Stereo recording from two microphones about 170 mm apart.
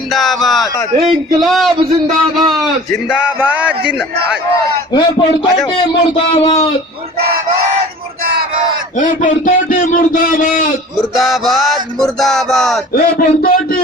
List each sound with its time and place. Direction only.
0.1 s speech: centre (ahead or behind)
1.0 s music: centre (ahead or behind)
2.0 s a man's voice: centre (ahead or behind)
3.1 s music: 5° right (ahead or behind)
4.9 s a man's voice: 25° left (ahead or behind)
9.0 s a man's voice: 50° left (ahead or behind)
11.1 s music: centre (ahead or behind)
12.9 s speech: 55° left (ahead or behind)